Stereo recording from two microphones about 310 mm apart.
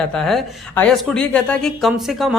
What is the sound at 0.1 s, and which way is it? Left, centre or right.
A woman's voice, centre.